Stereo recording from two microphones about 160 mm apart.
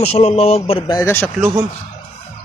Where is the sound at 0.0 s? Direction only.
40° left (ahead or behind).